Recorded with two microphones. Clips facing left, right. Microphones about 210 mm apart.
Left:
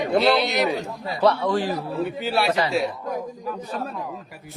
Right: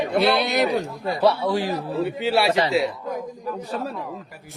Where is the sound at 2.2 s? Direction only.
25° right (ahead or behind).